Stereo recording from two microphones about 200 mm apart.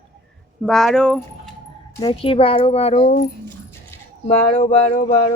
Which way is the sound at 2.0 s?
30° left (ahead or behind).